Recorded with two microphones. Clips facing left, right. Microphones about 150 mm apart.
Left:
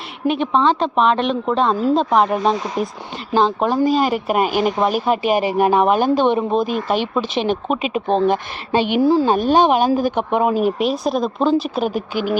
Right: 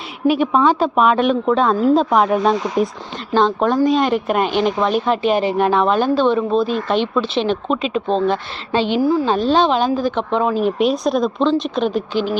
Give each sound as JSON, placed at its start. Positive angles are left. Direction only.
{"t": 0.3, "sound": "speech", "side_deg": -10}
{"t": 9.0, "sound": "speech", "side_deg": 30}
{"t": 9.2, "sound": "speech", "side_deg": 15}